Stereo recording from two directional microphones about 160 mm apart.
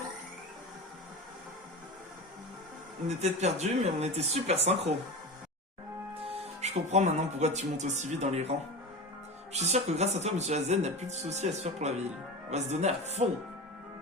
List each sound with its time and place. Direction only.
3.1 s speech: 45° right (ahead or behind)
6.1 s speech: 35° right (ahead or behind)